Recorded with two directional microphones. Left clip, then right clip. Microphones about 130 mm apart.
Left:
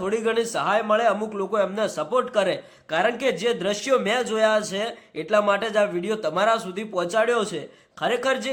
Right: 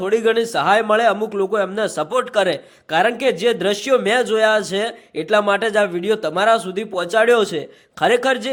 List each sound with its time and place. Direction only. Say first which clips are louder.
0.0 s a man's voice: right 6 dB; 30° right (ahead or behind)
2.0 s speech: right 4 dB; 35° right (ahead or behind)